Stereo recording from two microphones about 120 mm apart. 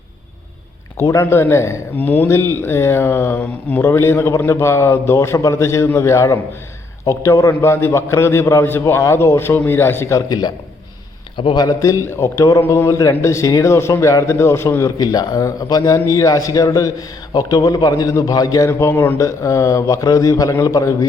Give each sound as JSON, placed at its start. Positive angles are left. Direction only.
{"t": 0.9, "sound": "a man's voice", "side_deg": 25}